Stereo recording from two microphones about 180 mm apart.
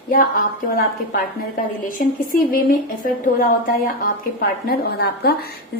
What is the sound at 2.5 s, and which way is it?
A woman's voice, 50° left (ahead or behind).